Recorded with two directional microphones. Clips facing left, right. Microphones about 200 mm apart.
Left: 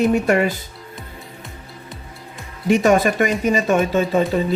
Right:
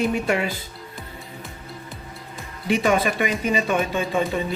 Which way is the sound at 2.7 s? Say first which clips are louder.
Left 5 dB; 45° left (ahead or behind).